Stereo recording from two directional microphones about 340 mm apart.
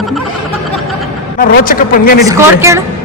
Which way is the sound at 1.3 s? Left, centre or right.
Left.